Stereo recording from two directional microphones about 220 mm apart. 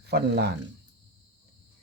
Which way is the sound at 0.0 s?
50° right (ahead or behind).